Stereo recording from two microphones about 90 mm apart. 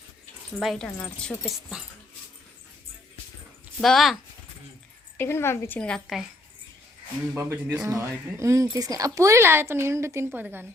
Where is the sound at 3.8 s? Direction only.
Centre (ahead or behind).